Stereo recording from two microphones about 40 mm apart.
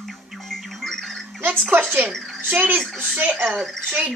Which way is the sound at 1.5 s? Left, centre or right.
Right.